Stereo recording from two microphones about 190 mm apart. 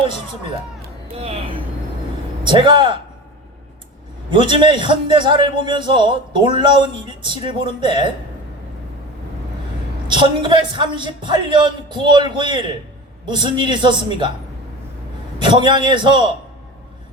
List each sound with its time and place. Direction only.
1.1 s a man's voice: 30° right (ahead or behind)
4.3 s a man's voice: 25° right (ahead or behind)
10.1 s a man's voice: 25° right (ahead or behind)
15.4 s a man's voice: 25° right (ahead or behind)